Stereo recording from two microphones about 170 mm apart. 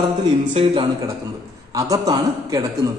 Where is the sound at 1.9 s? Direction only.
20° right (ahead or behind).